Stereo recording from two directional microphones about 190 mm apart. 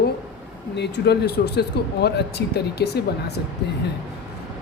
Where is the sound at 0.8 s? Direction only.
60° left (ahead or behind).